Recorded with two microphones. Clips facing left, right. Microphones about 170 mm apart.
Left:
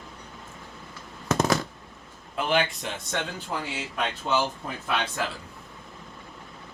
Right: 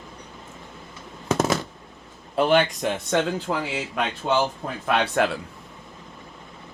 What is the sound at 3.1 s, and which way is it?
Speech, 90° right.